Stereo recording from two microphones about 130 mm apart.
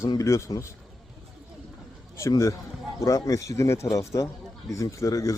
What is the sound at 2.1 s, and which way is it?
Speech, 25° left (ahead or behind).